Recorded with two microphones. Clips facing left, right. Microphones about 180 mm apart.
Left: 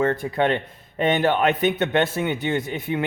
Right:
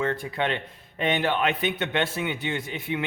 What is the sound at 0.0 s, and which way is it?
A man's voice, 45° left (ahead or behind).